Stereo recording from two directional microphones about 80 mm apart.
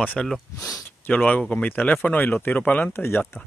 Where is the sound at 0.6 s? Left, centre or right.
Left.